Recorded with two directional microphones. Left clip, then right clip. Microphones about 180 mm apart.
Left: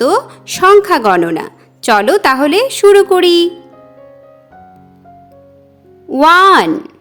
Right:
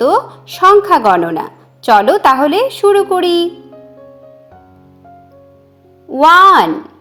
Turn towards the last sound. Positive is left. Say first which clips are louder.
# right 1 dB
turn(degrees=30)  # may be behind; listen again after turning